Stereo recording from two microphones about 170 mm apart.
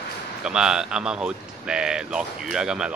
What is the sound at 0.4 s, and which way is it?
Speech, 5° right (ahead or behind).